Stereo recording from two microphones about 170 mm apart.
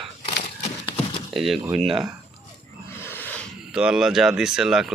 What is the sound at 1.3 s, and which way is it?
Speech, centre (ahead or behind).